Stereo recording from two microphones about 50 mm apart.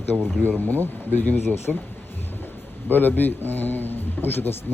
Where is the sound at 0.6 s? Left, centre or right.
Left.